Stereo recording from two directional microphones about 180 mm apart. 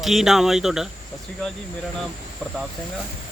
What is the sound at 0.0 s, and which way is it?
Speech, centre (ahead or behind).